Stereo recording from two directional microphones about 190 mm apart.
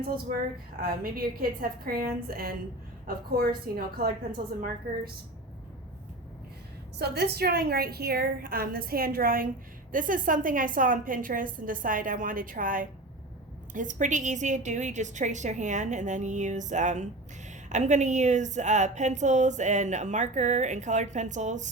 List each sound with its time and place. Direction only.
0.8 s a woman's voice: 50° right (ahead or behind)
7.0 s a woman's voice: 60° right (ahead or behind); by 21.7 s 40° right (ahead or behind)